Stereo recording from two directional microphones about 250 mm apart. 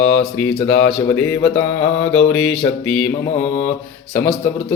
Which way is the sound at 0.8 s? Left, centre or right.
Centre.